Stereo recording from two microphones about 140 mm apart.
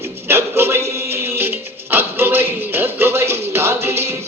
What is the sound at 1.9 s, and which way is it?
Music, 15° right (ahead or behind).